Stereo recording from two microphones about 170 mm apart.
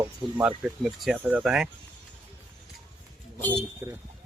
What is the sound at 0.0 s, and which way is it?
Speech, 10° right (ahead or behind).